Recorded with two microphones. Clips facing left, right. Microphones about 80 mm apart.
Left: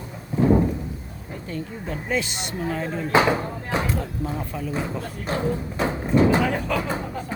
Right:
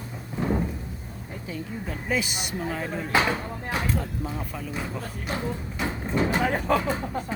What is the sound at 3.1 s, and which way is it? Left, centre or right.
Speech, left.